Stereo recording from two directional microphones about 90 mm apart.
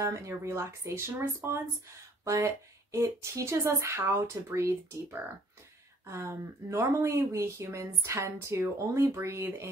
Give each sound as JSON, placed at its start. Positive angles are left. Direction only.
{"t": 0.0, "sound": "speech", "side_deg": -35}